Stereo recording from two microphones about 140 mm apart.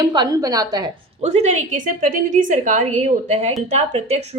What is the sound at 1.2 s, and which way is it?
A woman's voice, 50° right (ahead or behind).